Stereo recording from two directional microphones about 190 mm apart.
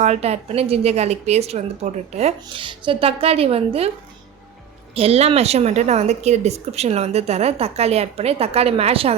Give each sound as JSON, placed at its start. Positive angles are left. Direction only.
{"t": 0.0, "sound": "a woman's voice", "side_deg": -35}
{"t": 4.9, "sound": "a woman's voice", "side_deg": -30}